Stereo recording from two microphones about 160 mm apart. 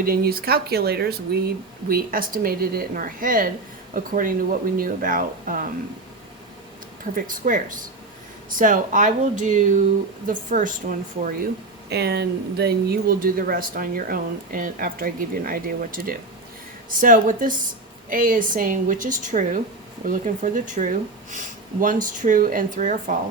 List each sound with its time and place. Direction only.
0.0 s speech: 70° right (ahead or behind); by 1.4 s 85° right
1.9 s speech: 65° right (ahead or behind)
7.0 s speech: 55° right (ahead or behind)
11.9 s speech: 90° right; by 23.1 s 55° right (ahead or behind)